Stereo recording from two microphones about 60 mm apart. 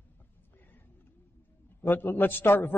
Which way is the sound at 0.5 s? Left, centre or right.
Left.